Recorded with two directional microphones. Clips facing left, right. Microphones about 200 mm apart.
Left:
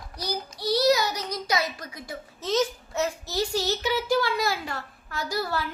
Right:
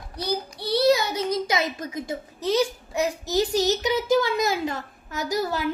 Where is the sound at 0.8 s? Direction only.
25° right (ahead or behind).